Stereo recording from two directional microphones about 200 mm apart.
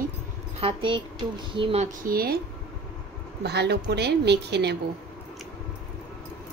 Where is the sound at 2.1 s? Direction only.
50° right (ahead or behind).